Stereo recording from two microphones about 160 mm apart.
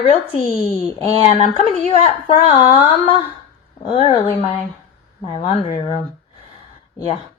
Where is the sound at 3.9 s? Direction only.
35° left (ahead or behind).